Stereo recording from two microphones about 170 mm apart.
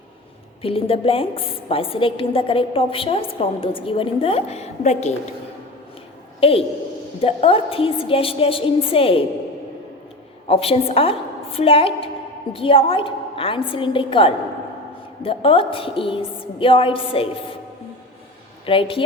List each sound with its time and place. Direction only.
0.6 s a woman's voice: 35° left (ahead or behind)
6.4 s a woman's voice: 35° left (ahead or behind)
10.5 s a woman's voice: 35° left (ahead or behind)
18.6 s a woman's voice: 30° left (ahead or behind)